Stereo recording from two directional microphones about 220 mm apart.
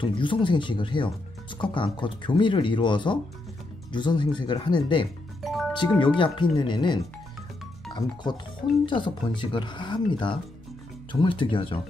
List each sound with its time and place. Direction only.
0.0 s speech: 20° left (ahead or behind)
5.4 s music: centre (ahead or behind)
5.7 s speech: 20° left (ahead or behind)